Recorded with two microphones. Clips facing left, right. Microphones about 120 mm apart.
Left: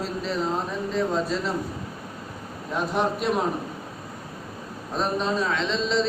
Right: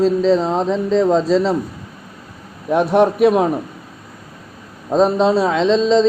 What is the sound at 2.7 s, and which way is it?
Speech, 65° right (ahead or behind).